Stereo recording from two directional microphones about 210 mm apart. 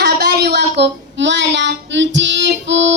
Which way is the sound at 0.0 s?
50° right (ahead or behind).